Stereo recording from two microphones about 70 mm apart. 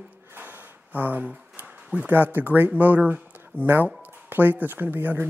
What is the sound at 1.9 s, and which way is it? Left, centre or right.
Speech, right.